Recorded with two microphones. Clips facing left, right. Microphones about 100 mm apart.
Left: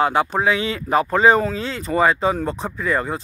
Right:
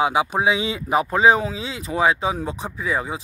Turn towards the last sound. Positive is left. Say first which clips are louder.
# left 3 dB
turn(degrees=-5)  # may be behind; listen again after turning